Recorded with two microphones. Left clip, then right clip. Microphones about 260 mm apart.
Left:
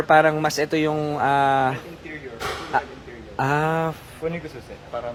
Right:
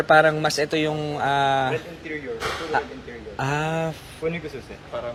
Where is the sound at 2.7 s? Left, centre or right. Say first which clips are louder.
Left 1 dB; left.